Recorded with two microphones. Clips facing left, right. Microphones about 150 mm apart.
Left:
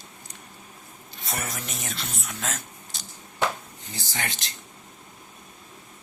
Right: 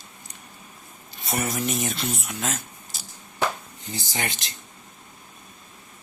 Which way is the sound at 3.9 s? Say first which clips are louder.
Right 3 dB; 15° right (ahead or behind).